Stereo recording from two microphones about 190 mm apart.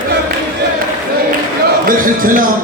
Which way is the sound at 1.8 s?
45° right (ahead or behind).